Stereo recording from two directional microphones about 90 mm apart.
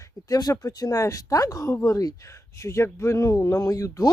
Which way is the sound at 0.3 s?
45° left (ahead or behind).